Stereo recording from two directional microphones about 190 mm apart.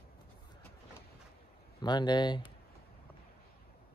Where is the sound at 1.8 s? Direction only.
25° left (ahead or behind).